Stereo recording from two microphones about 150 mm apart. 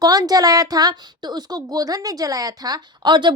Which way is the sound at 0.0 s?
25° right (ahead or behind).